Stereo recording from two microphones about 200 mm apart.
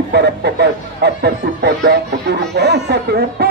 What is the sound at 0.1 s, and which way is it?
Speech, 55° right (ahead or behind).